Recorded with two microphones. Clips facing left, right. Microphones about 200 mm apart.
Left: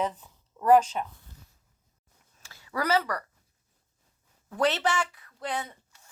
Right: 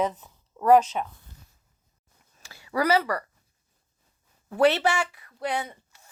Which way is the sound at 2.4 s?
10° right (ahead or behind).